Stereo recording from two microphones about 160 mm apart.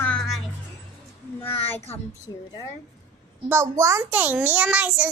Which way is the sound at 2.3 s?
25° left (ahead or behind).